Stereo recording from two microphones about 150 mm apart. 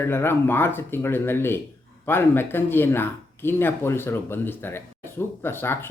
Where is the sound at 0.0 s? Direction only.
15° left (ahead or behind).